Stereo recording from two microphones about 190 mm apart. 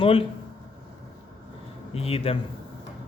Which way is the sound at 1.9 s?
30° left (ahead or behind).